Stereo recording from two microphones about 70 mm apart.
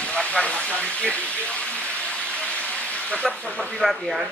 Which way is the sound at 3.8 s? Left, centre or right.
Centre.